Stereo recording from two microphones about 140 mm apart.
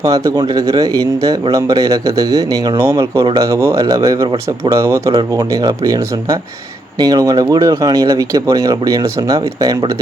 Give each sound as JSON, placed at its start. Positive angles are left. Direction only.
{"t": 0.0, "sound": "speech", "side_deg": -25}